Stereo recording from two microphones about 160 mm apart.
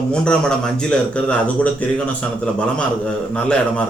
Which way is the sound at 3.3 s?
5° left (ahead or behind).